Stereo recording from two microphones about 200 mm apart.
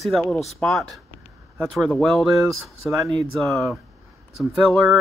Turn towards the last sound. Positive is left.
turn(degrees=0)  # may be behind; listen again after turning